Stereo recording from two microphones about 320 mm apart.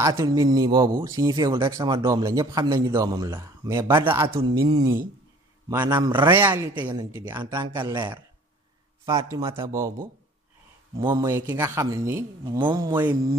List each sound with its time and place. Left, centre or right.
0.0 s a man's voice: centre
11.0 s a man's voice: centre